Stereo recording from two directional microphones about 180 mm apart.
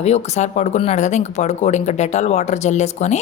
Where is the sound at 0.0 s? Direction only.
40° left (ahead or behind).